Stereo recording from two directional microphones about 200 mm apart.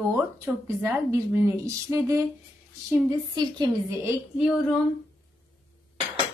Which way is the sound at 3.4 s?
20° right (ahead or behind).